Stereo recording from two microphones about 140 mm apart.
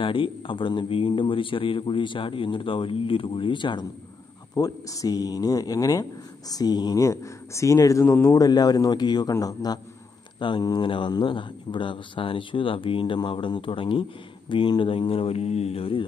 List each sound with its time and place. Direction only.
0.0 s a man's voice: 40° left (ahead or behind)
4.6 s a man's voice: 25° left (ahead or behind); by 16.0 s 45° left (ahead or behind)